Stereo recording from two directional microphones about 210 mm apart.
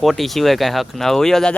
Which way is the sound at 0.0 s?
Centre (ahead or behind).